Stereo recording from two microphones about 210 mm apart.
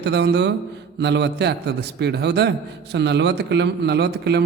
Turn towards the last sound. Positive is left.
turn(degrees=-55)  # may be behind; listen again after turning